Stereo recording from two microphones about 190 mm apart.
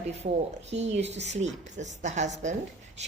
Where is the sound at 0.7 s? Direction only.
35° right (ahead or behind).